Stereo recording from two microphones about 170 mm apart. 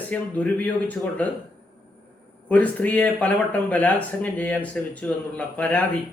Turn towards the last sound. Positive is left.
turn(degrees=10)  # may be behind; listen again after turning